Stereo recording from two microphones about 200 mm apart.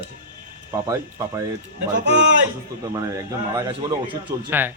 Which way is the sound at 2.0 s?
60° right (ahead or behind).